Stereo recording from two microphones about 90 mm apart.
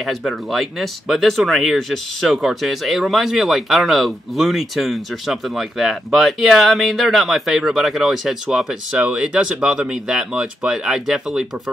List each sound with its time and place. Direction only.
0.0 s speech: centre (ahead or behind)